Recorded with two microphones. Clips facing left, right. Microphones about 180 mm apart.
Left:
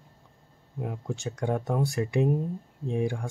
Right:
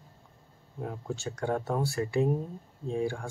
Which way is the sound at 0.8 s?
15° left (ahead or behind).